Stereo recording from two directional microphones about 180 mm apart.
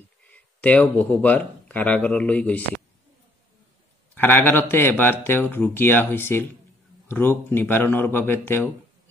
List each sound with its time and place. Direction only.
0.3 s speech: 10° left (ahead or behind)
4.1 s speech: 10° left (ahead or behind)